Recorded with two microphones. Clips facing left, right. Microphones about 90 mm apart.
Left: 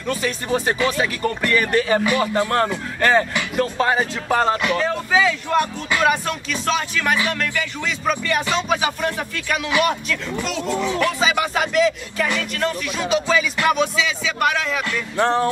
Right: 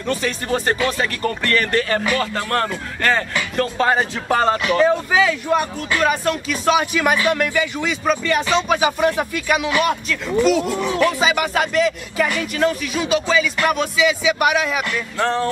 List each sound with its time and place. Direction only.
0.1 s speech: 10° left (ahead or behind)
3.6 s speech: 5° left (ahead or behind)
6.0 s speech: 5° right (ahead or behind)
8.7 s speech: 10° right (ahead or behind)
9.7 s speech: centre (ahead or behind)
15.1 s music: 20° left (ahead or behind)